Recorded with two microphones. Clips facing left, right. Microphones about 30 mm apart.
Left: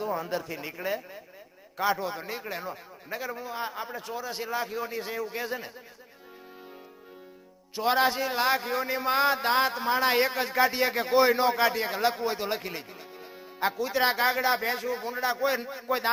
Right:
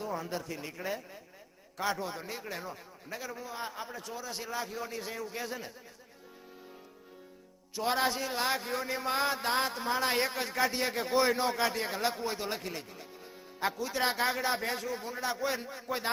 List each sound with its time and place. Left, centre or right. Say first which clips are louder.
0.0 s a man's voice: left 6 dB; left
7.8 s a man's voice: left 6 dB; centre